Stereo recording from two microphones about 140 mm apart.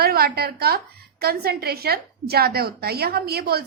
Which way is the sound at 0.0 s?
90° right.